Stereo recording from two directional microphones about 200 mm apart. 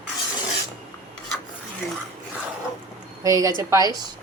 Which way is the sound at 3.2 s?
15° right (ahead or behind).